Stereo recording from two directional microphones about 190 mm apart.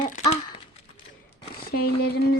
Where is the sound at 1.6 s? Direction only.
55° left (ahead or behind).